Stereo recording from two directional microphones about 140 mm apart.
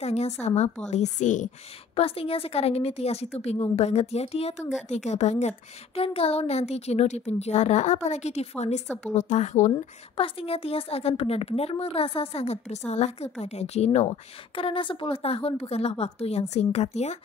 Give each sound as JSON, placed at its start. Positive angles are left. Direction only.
{"t": 0.0, "sound": "a woman's voice", "side_deg": 50}
{"t": 2.0, "sound": "a woman's voice", "side_deg": 45}
{"t": 5.9, "sound": "speech", "side_deg": 45}
{"t": 8.8, "sound": "speech", "side_deg": 5}
{"t": 9.1, "sound": "speech", "side_deg": 55}